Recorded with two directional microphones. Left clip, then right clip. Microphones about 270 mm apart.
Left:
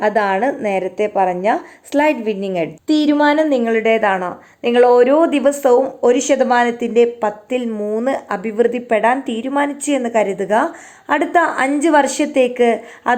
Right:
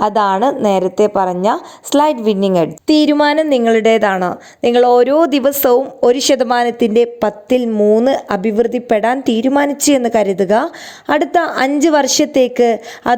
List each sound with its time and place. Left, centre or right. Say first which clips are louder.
0.3 s a woman's voice: right 4 dB; right
6.6 s a woman's voice: right 2 dB; right
7.0 s a woman's voice: right 1 dB; right